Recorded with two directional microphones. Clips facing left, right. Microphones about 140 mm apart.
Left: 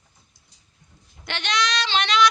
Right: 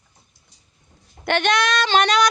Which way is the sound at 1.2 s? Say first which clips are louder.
Right 7 dB; 50° right (ahead or behind).